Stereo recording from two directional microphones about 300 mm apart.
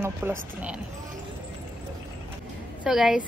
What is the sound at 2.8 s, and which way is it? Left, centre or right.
Speech, centre.